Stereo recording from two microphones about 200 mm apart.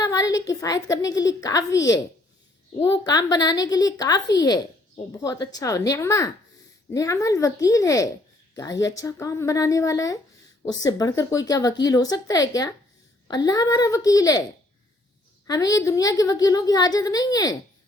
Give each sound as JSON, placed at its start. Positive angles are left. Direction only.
{"t": 0.0, "sound": "a woman's voice", "side_deg": 15}
{"t": 15.4, "sound": "a woman's voice", "side_deg": 20}